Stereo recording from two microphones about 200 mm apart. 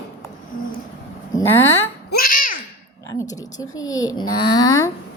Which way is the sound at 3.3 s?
20° left (ahead or behind).